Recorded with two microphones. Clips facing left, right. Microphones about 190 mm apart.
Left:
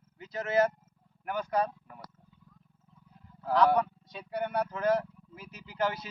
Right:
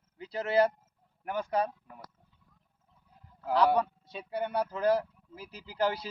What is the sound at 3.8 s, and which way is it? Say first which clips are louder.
Speech: even; 30° right (ahead or behind).